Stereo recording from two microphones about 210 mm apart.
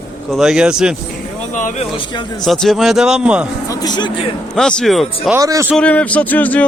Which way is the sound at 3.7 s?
20° left (ahead or behind).